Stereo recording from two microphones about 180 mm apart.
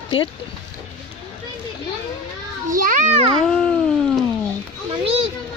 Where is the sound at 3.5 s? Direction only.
5° left (ahead or behind).